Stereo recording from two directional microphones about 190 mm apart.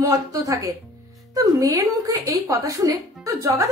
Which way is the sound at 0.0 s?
20° right (ahead or behind).